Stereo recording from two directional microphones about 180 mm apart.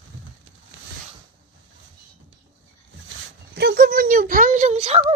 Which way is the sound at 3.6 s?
65° right (ahead or behind).